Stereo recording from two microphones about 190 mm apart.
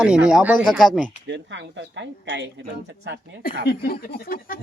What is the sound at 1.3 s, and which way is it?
A woman's voice, 70° right (ahead or behind).